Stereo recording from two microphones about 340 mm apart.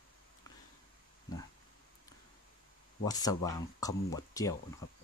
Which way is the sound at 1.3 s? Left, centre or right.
Centre.